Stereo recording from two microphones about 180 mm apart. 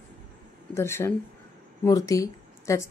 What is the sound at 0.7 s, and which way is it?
A woman's voice, 15° left (ahead or behind).